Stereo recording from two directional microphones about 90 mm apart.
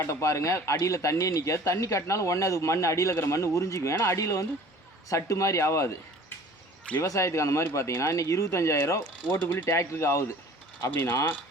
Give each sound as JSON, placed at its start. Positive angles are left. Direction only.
{"t": 0.0, "sound": "speech", "side_deg": 35}
{"t": 7.0, "sound": "speech", "side_deg": 35}
{"t": 9.4, "sound": "speech", "side_deg": 20}